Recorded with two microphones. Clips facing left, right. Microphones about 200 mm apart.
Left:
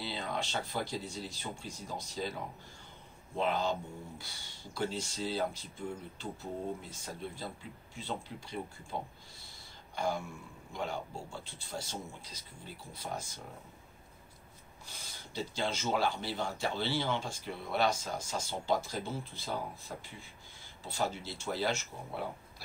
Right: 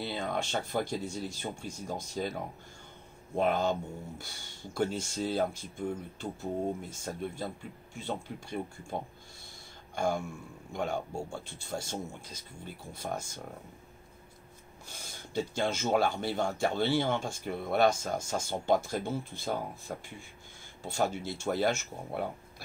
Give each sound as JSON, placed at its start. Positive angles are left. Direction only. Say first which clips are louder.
{"t": 0.0, "sound": "speech", "louder": "right 4 dB", "side_deg": -50}
{"t": 3.3, "sound": "speech", "louder": "right 4 dB", "side_deg": -50}
{"t": 9.9, "sound": "speech", "louder": "right 4 dB", "side_deg": -50}
{"t": 14.9, "sound": "speech", "louder": "right 4 dB", "side_deg": -50}
{"t": 20.8, "sound": "speech", "louder": "right 4 dB", "side_deg": -50}